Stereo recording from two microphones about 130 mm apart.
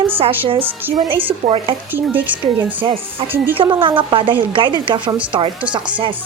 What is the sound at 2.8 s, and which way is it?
Speech, 40° right (ahead or behind).